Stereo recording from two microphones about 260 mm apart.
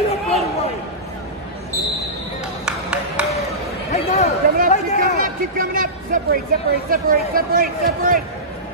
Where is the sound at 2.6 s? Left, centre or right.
Centre.